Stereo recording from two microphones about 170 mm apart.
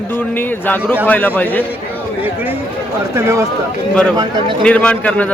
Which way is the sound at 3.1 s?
20° right (ahead or behind).